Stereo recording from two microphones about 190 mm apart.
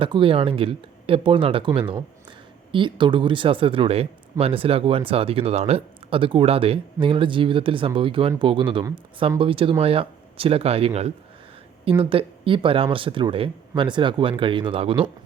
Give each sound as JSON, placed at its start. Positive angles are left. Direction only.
{"t": 0.0, "sound": "speech", "side_deg": -25}